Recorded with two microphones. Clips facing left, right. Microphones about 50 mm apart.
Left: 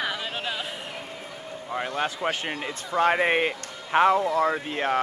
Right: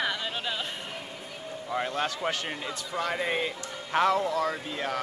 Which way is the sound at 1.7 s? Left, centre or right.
Centre.